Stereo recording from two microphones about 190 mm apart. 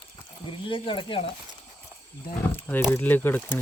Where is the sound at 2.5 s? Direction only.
10° left (ahead or behind).